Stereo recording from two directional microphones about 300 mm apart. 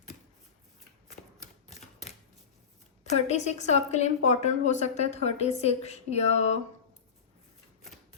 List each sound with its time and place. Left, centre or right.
1.4 s typewriter: left
3.0 s a woman's voice: left